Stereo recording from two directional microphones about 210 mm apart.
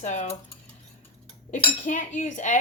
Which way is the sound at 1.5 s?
35° left (ahead or behind).